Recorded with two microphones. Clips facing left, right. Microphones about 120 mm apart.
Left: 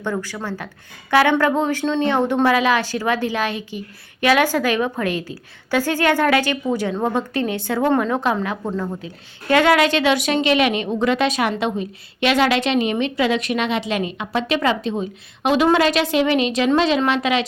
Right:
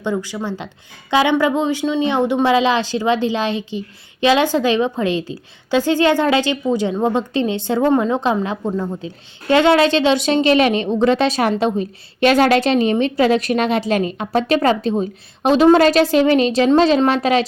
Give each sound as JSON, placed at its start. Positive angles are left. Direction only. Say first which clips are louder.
{"t": 0.0, "sound": "a woman's voice", "louder": "right 3 dB", "side_deg": -15}